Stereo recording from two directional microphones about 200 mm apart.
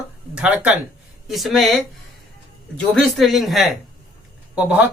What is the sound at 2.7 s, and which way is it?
Speech, centre (ahead or behind).